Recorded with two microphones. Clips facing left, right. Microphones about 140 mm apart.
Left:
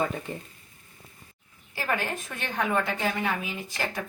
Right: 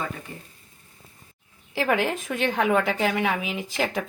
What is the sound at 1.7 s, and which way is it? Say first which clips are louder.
Speech: right 6 dB; 90° right.